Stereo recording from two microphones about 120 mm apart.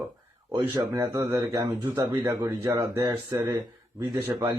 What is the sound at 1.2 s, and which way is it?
A man's voice, 15° right (ahead or behind).